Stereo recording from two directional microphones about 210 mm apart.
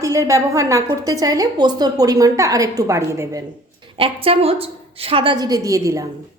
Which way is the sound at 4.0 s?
25° right (ahead or behind).